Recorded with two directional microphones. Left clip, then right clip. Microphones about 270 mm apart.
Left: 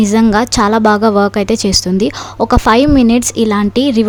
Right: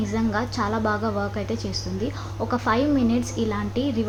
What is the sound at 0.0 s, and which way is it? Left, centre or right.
Speech, left.